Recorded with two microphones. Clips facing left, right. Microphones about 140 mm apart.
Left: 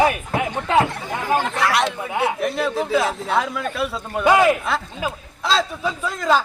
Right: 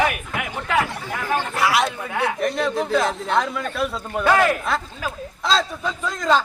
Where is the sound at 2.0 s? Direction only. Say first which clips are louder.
Left 2 dB; 20° left (ahead or behind).